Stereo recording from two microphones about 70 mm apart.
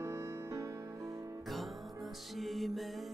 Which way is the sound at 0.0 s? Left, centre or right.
Right.